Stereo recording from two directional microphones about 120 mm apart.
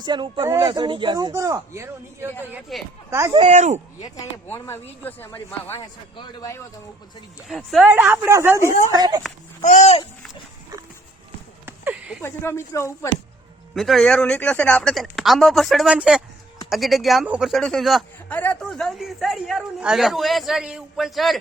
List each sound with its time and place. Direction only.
0.0 s speech: 40° right (ahead or behind)
1.3 s speech: 25° right (ahead or behind)
2.7 s speech: centre (ahead or behind)
3.1 s speech: 25° right (ahead or behind)
3.4 s speech: 80° right
4.4 s speech: 20° left (ahead or behind)
7.4 s speech: centre (ahead or behind)
7.9 s speech: 15° right (ahead or behind); by 9.2 s 35° right (ahead or behind)
9.6 s speech: 75° left (ahead or behind)
11.6 s a sound: 15° right (ahead or behind)
12.2 s speech: 20° left (ahead or behind)
13.7 s speech: centre (ahead or behind)
18.3 s a sound: 15° left (ahead or behind)
18.7 s speech: centre (ahead or behind)